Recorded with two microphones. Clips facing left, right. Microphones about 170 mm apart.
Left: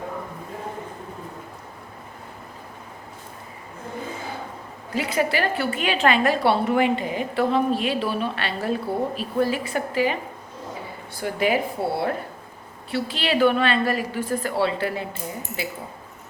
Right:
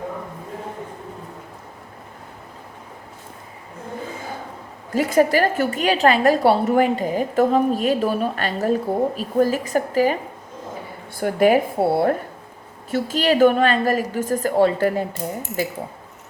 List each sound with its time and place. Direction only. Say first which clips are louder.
4.9 s a woman's voice: right 7 dB; 45° right (ahead or behind)
11.2 s a woman's voice: right 6 dB; 50° right (ahead or behind)